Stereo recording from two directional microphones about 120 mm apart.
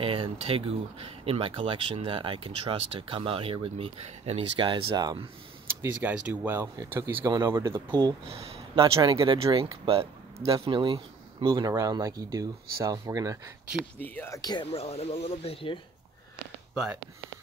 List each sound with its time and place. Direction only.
0.0 s speech: 50° right (ahead or behind)
5.9 s speech: 15° right (ahead or behind)
8.3 s speech: 55° right (ahead or behind); by 13.4 s 30° right (ahead or behind)
13.9 s speech: 15° left (ahead or behind)
14.3 s speech: 35° left (ahead or behind)
14.7 s speech: 60° left (ahead or behind)